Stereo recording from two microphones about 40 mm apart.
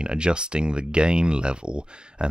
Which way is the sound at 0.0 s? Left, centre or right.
Right.